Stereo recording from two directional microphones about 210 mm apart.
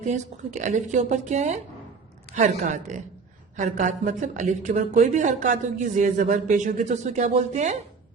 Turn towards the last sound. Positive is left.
turn(degrees=-35)  # may be behind; listen again after turning